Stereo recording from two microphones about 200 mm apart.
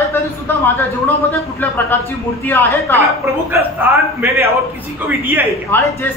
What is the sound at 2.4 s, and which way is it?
Speech, 10° left (ahead or behind).